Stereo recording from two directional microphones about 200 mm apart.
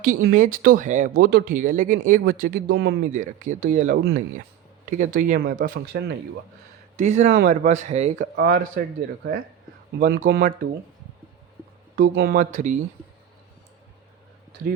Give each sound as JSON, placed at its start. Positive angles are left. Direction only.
{"t": 0.3, "sound": "speech", "side_deg": -40}
{"t": 2.7, "sound": "speech", "side_deg": -60}
{"t": 3.1, "sound": "speech", "side_deg": -40}
{"t": 8.4, "sound": "speech", "side_deg": -50}
{"t": 12.0, "sound": "speech", "side_deg": -50}